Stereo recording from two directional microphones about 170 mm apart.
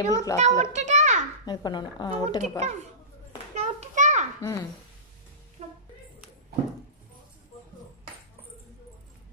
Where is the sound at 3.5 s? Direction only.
40° right (ahead or behind).